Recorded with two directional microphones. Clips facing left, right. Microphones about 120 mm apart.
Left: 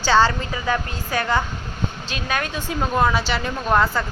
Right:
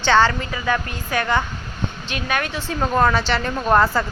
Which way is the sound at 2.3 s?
15° left (ahead or behind).